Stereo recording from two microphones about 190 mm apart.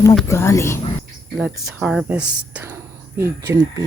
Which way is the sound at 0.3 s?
15° left (ahead or behind).